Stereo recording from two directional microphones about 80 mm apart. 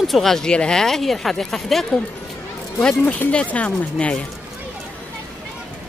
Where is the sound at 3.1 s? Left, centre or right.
Centre.